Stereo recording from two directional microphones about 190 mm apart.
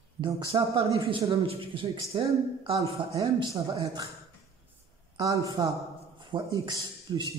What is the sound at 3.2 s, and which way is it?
Speech, 15° right (ahead or behind).